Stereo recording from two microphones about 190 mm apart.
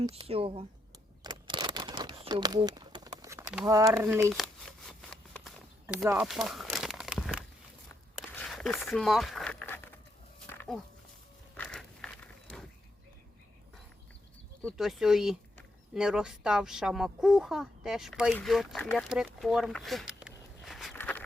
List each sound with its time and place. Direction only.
0.1 s speech: 30° right (ahead or behind)
1.2 s crumpling: 20° right (ahead or behind)
3.6 s speech: 20° right (ahead or behind)
3.8 s speech: 5° right (ahead or behind)
4.9 s a sound: 5° left (ahead or behind)
5.8 s speech: 5° right (ahead or behind)
6.2 s a sound: centre (ahead or behind)
10.4 s dog: 5° left (ahead or behind)
11.5 s a sound: 5° left (ahead or behind)
14.8 s speech: centre (ahead or behind)
18.9 s walk: 5° right (ahead or behind)
20.9 s walk: 10° left (ahead or behind)